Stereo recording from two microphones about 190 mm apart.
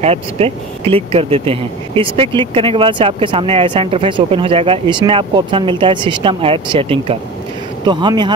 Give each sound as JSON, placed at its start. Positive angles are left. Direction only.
{"t": 0.0, "sound": "speech", "side_deg": -30}